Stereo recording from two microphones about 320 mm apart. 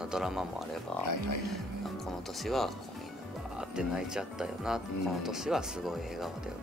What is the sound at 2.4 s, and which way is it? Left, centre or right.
Speech, centre.